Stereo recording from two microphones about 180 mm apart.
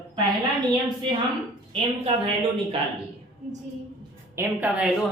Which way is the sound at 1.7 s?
30° right (ahead or behind).